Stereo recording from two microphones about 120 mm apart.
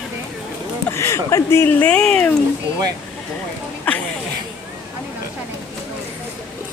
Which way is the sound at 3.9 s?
15° left (ahead or behind).